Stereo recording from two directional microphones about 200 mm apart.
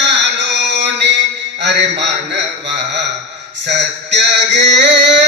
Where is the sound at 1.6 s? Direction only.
60° right (ahead or behind).